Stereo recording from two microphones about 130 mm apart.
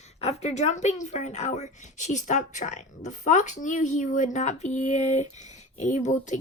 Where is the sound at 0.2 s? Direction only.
55° left (ahead or behind).